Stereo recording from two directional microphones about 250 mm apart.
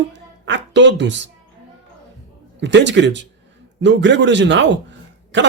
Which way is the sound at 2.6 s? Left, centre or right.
Right.